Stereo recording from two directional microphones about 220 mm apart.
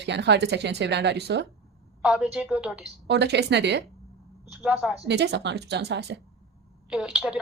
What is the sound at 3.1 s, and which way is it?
Speech, 50° right (ahead or behind).